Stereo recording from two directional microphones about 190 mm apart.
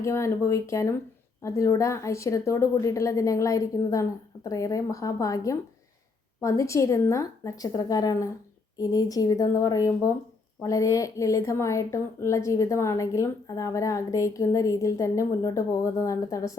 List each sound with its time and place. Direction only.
0.0 s a woman's voice: 15° left (ahead or behind)